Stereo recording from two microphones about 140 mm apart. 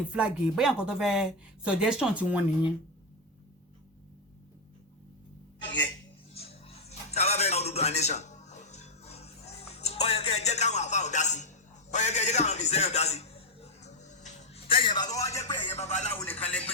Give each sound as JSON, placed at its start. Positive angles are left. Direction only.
{"t": 0.1, "sound": "speech", "side_deg": -5}
{"t": 6.3, "sound": "music", "side_deg": 45}
{"t": 14.7, "sound": "speech", "side_deg": 35}
{"t": 15.5, "sound": "music", "side_deg": 45}
{"t": 16.0, "sound": "speech", "side_deg": 10}